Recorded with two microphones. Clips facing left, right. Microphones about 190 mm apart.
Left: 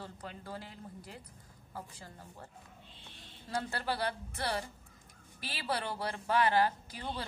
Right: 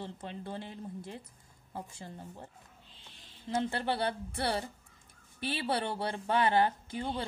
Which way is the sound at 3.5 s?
25° right (ahead or behind).